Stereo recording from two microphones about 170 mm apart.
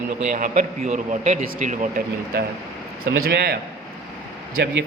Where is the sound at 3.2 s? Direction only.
65° right (ahead or behind).